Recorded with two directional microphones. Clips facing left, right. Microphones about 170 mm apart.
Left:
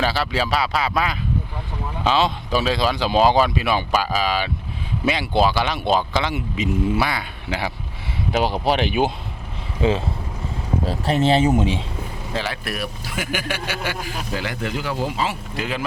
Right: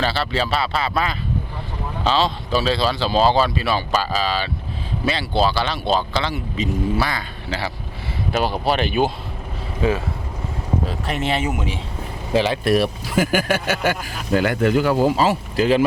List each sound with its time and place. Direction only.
0.0 s speech: 10° left (ahead or behind)
10.8 s speech: 30° left (ahead or behind)
12.3 s speech: 20° right (ahead or behind)
13.3 s speech: 45° right (ahead or behind); by 15.8 s 30° right (ahead or behind)